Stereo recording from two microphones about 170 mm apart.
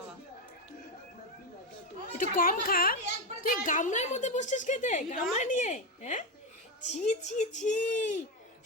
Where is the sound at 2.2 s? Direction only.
55° left (ahead or behind).